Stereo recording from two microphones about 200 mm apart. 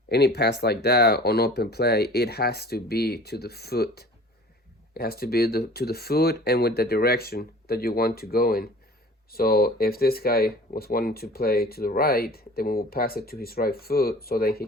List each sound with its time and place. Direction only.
0.1 s speech: 55° left (ahead or behind)